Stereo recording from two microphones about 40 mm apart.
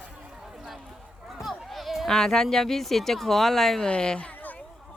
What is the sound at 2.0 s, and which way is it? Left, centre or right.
Speech, centre.